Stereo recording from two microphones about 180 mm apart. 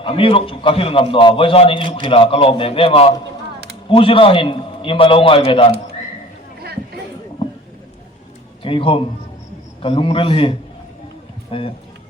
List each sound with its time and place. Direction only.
0.0 s a man's voice: 30° left (ahead or behind)
8.6 s a man's voice: 30° left (ahead or behind)